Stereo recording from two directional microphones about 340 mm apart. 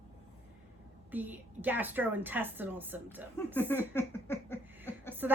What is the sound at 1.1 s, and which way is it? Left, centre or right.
A woman's voice, centre.